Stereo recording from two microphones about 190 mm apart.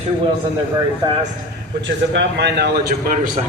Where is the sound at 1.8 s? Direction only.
70° right (ahead or behind).